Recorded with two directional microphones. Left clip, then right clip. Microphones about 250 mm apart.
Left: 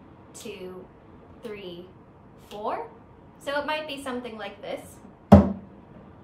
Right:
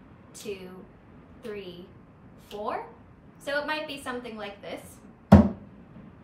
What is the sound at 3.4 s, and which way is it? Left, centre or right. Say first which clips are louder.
A woman's voice: left 1 dB; centre.